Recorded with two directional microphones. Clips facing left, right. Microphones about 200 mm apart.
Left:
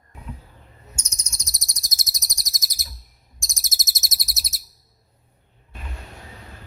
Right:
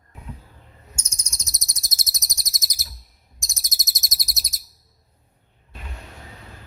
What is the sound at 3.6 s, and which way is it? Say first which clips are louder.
Chirp: left 1 dB; 5° left (ahead or behind).